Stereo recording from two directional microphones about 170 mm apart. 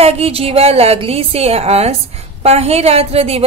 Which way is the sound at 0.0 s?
35° right (ahead or behind).